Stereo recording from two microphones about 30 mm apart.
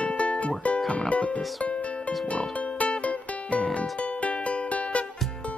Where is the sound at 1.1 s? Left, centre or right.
Left.